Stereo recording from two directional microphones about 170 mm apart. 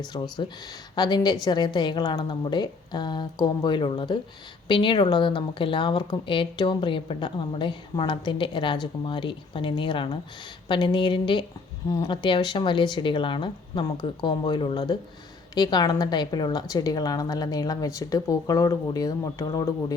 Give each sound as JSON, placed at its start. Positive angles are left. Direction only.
{"t": 0.0, "sound": "speech", "side_deg": 25}